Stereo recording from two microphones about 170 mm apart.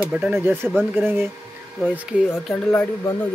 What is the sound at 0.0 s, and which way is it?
Speech, 5° right (ahead or behind).